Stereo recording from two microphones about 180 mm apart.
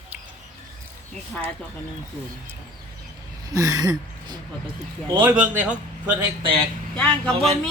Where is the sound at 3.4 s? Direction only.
20° right (ahead or behind).